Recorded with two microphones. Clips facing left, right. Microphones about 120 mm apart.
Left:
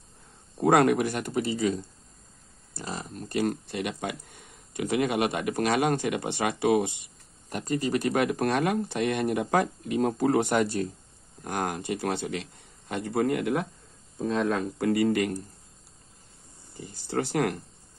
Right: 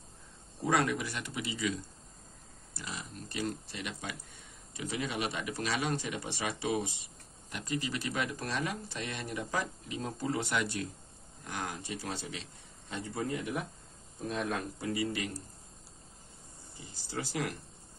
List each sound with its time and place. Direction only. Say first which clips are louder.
0.6 s speech: left 9 dB; 55° left (ahead or behind)
7.4 s speech: left 8 dB; 45° left (ahead or behind)
11.4 s speech: left 9 dB; 55° left (ahead or behind)
16.7 s speech: left 10 dB; 55° left (ahead or behind)